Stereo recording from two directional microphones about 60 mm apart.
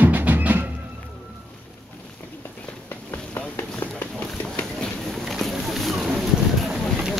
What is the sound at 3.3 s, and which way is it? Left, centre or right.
Run, left.